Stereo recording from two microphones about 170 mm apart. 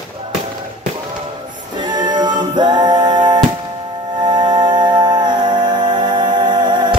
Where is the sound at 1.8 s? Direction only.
25° right (ahead or behind).